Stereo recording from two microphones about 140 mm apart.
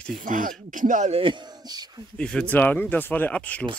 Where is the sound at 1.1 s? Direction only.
35° right (ahead or behind).